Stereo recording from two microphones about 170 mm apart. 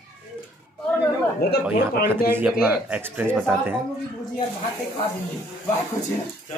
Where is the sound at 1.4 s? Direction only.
70° left (ahead or behind).